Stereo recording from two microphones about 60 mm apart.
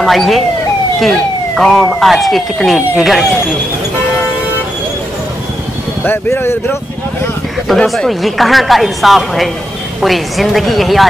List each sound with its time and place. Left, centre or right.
0.0 s a woman's voice: centre
6.0 s speech: left
7.6 s a woman's voice: centre